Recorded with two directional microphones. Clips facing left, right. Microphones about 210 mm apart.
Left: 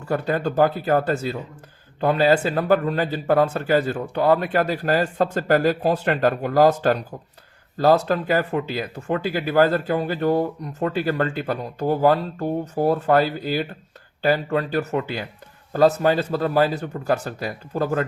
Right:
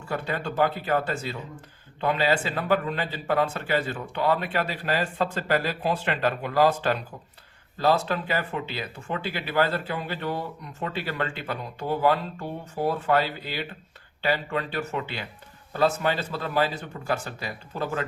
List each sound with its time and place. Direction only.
0.0 s speech: 40° left (ahead or behind)